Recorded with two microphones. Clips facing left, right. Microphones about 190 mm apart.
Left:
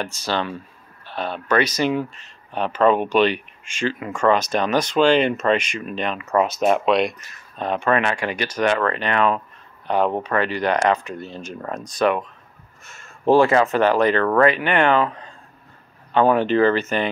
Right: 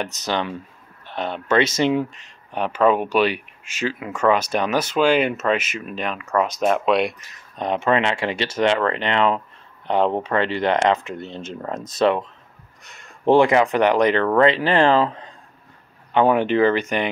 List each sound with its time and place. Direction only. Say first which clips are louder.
0.0 s speech: even; 20° right (ahead or behind); by 7.0 s 5° left (ahead or behind)
7.5 s speech: right 1 dB; 20° right (ahead or behind)